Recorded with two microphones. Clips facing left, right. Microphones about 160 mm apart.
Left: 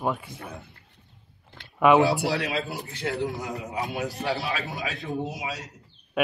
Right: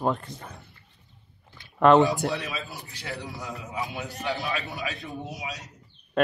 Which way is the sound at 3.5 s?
40° left (ahead or behind).